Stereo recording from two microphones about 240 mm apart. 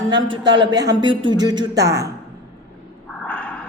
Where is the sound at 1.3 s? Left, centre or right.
Centre.